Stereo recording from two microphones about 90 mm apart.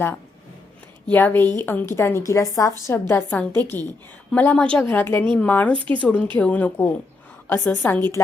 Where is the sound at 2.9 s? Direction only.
25° left (ahead or behind).